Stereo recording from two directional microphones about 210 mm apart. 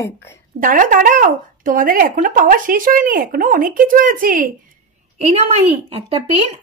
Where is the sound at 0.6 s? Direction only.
40° right (ahead or behind).